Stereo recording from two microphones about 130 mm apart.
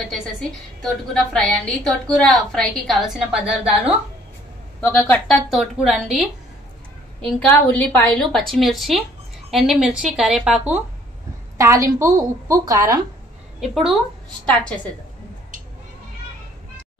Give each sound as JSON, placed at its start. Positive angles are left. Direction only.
{"t": 0.1, "sound": "a woman's voice", "side_deg": 5}
{"t": 4.8, "sound": "a woman's voice", "side_deg": 10}
{"t": 5.5, "sound": "a woman's voice", "side_deg": -5}
{"t": 7.2, "sound": "a woman's voice", "side_deg": 10}
{"t": 11.5, "sound": "a woman's voice", "side_deg": -25}
{"t": 13.6, "sound": "a woman's voice", "side_deg": 0}